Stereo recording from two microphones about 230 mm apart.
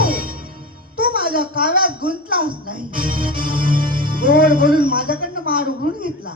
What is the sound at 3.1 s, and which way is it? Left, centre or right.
Music, right.